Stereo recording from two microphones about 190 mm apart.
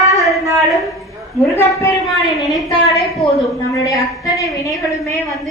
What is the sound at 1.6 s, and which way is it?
Speech, 15° left (ahead or behind).